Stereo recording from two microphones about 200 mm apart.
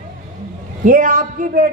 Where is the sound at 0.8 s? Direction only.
45° right (ahead or behind).